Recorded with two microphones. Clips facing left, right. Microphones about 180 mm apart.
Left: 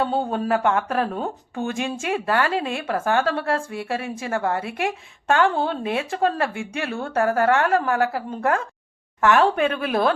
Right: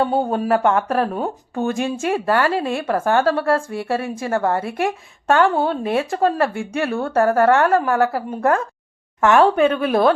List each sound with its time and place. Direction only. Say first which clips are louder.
0.2 s speech: right 4 dB; 45° right (ahead or behind)